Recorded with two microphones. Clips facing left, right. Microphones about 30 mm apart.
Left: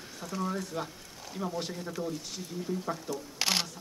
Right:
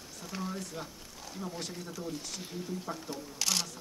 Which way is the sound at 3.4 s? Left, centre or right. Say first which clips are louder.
Left 3 dB; left.